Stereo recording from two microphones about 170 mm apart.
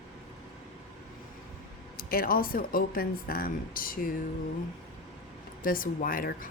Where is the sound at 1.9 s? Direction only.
60° left (ahead or behind).